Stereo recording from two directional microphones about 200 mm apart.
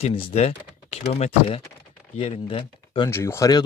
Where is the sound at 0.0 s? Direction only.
25° left (ahead or behind).